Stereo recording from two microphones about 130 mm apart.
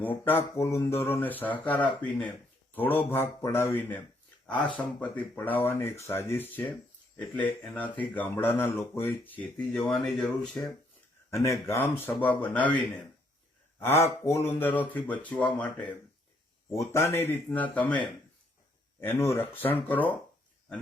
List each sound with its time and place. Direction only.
0.0 s speech: 15° left (ahead or behind)
11.4 s speech: 25° left (ahead or behind)
16.7 s speech: 25° left (ahead or behind)